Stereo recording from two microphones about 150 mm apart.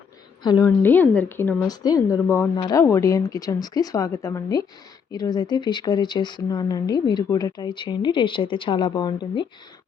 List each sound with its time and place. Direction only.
0.4 s speech: 25° left (ahead or behind)
0.8 s speech: 10° left (ahead or behind)
1.6 s speech: 25° left (ahead or behind)